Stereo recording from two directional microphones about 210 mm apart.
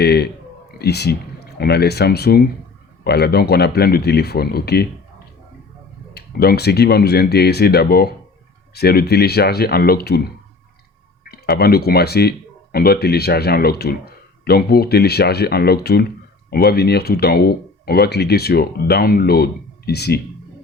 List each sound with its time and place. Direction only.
0.0 s speech: 50° left (ahead or behind)
6.1 s speech: 50° left (ahead or behind)